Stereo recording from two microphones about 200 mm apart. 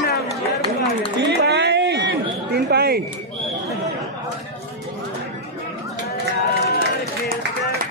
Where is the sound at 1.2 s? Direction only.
55° right (ahead or behind).